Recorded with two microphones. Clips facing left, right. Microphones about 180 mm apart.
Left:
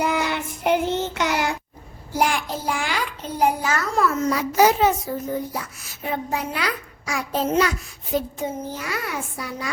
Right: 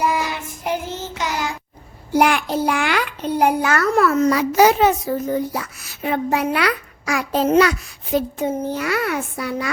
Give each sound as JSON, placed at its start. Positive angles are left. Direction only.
{"t": 0.0, "sound": "child singing", "side_deg": 60}
{"t": 2.1, "sound": "a child's voice", "side_deg": -65}